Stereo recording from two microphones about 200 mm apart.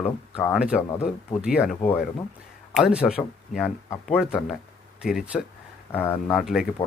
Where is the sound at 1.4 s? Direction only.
5° right (ahead or behind).